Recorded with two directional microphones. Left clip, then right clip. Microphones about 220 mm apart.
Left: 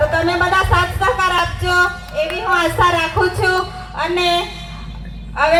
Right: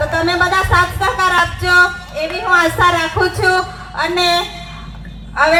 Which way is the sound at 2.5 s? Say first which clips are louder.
Right 3 dB; 35° right (ahead or behind).